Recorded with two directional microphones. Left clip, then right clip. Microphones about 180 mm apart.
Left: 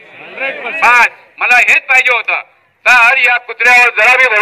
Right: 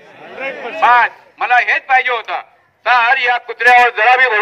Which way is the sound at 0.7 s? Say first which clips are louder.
Left 2 dB; 15° left (ahead or behind).